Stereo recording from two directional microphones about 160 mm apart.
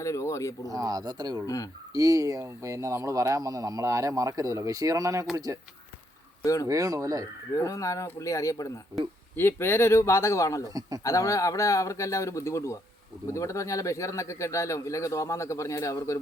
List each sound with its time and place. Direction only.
0.0 s speech: 20° left (ahead or behind)
0.7 s speech: 25° right (ahead or behind)
6.4 s speech: 20° left (ahead or behind)
6.7 s speech: 20° right (ahead or behind)
7.5 s speech: 20° left (ahead or behind)
10.8 s speech: 20° right (ahead or behind)
11.0 s speech: 20° left (ahead or behind)